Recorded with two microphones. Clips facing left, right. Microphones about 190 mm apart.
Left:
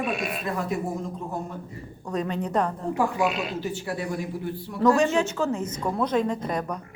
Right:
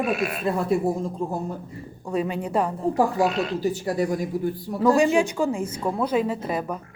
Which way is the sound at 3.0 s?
35° right (ahead or behind).